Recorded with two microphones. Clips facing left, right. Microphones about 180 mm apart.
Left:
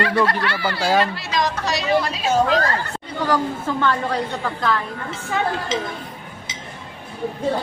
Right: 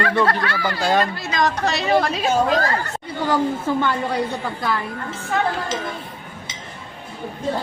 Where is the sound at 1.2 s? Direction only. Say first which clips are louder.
Right 2 dB; 50° right (ahead or behind).